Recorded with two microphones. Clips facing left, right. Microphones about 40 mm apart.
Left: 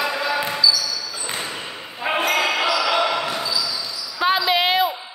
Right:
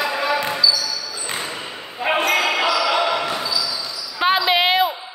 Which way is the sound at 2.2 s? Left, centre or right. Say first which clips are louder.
Even; centre.